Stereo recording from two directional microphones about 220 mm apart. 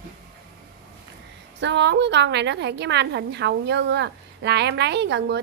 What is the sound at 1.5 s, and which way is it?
A woman's voice, 55° right (ahead or behind).